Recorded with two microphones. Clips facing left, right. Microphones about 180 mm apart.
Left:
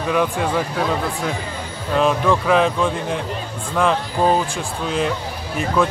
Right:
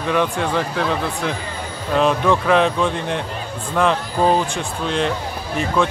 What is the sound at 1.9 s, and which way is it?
Speech, centre (ahead or behind).